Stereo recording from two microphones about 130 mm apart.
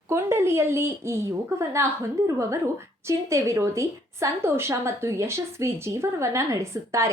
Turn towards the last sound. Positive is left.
turn(degrees=-20)  # may be behind; listen again after turning